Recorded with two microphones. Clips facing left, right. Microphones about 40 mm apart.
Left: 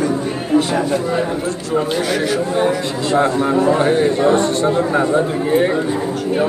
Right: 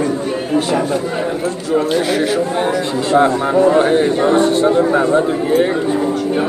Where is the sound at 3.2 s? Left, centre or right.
Centre.